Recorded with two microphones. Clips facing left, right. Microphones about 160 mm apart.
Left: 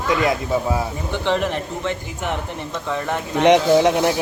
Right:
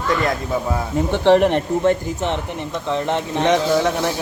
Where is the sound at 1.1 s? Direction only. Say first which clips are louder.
Right 8 dB; 60° right (ahead or behind).